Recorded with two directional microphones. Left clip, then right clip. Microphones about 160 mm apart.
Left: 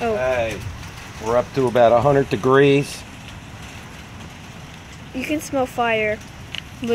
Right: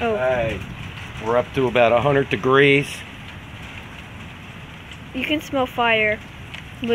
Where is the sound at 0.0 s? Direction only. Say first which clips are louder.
Even; centre (ahead or behind).